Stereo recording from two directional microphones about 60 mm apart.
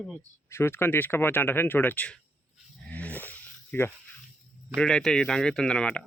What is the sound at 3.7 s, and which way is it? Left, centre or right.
Speech, left.